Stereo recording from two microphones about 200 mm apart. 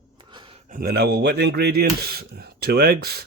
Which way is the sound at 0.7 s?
50° right (ahead or behind).